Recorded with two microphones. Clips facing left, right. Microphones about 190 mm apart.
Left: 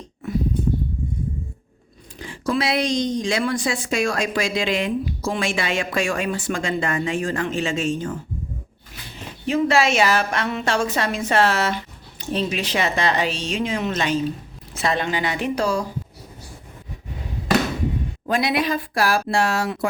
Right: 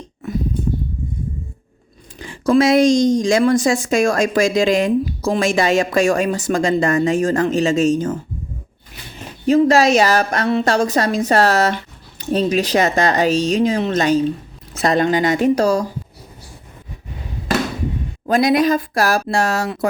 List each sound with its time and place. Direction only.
2.1 s a woman's voice: 45° right (ahead or behind)
9.5 s a woman's voice: 40° right (ahead or behind)
18.3 s a woman's voice: 40° right (ahead or behind)